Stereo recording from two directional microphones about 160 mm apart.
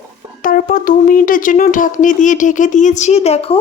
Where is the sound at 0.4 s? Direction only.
60° left (ahead or behind); by 3.6 s 40° left (ahead or behind).